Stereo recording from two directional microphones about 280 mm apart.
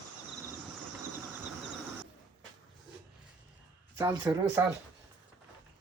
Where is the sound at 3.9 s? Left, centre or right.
Centre.